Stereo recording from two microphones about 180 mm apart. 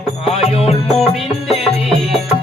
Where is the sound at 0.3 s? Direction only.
35° left (ahead or behind).